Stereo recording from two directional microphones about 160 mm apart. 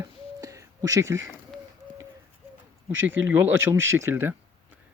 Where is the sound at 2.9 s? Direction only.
15° right (ahead or behind).